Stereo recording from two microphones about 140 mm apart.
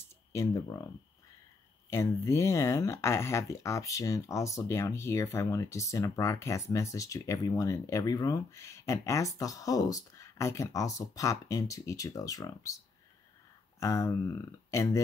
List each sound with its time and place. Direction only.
0.3 s speech: 25° left (ahead or behind)
1.9 s speech: 20° left (ahead or behind)
13.7 s speech: 20° left (ahead or behind)